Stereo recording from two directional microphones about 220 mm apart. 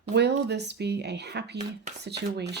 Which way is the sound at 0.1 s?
50° right (ahead or behind).